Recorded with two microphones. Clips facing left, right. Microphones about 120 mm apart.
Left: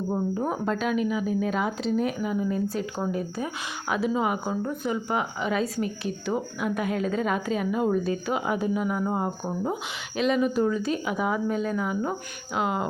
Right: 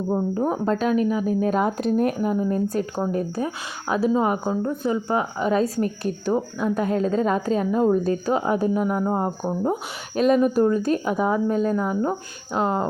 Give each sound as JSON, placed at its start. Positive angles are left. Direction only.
{"t": 0.1, "sound": "speech", "side_deg": -30}